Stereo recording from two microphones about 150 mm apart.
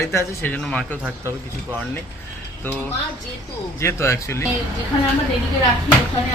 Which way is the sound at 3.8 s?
20° left (ahead or behind).